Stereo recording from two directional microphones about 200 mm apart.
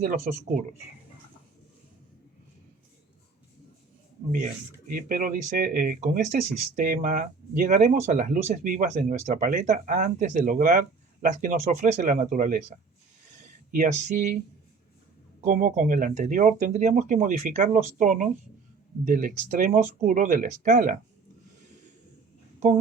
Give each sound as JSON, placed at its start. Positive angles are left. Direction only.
{"t": 0.0, "sound": "speech", "side_deg": -35}
{"t": 4.9, "sound": "speech", "side_deg": -45}
{"t": 15.4, "sound": "speech", "side_deg": -40}